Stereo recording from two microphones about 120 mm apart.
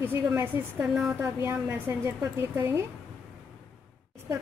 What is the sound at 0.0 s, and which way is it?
Speech, 20° right (ahead or behind).